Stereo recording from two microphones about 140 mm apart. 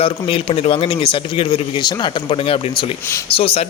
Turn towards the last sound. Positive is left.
turn(degrees=45)  # may be behind; listen again after turning